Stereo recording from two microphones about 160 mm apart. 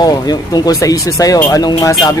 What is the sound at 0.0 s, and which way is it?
Speech, 25° left (ahead or behind).